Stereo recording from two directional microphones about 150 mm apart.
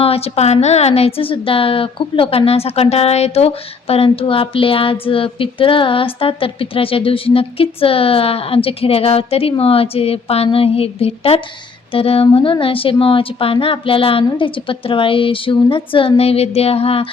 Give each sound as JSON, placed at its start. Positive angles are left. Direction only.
{"t": 0.0, "sound": "a woman's voice", "side_deg": 40}